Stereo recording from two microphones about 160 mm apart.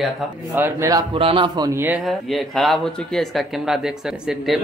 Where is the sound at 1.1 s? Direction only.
30° right (ahead or behind).